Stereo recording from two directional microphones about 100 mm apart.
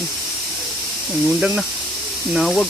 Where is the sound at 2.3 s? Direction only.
Centre (ahead or behind).